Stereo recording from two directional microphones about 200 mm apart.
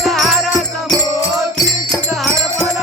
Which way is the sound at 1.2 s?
15° left (ahead or behind).